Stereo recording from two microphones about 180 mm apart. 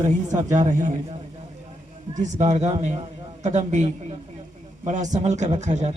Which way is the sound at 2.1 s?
40° right (ahead or behind).